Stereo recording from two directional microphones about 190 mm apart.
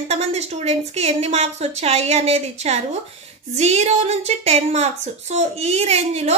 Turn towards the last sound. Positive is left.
turn(degrees=-35)  # may be behind; listen again after turning